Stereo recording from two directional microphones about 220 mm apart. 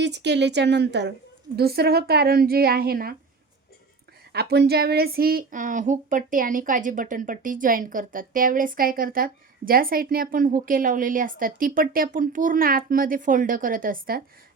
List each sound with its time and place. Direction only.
0.0 s a woman's voice: 50° right (ahead or behind)
4.3 s speech: 45° right (ahead or behind)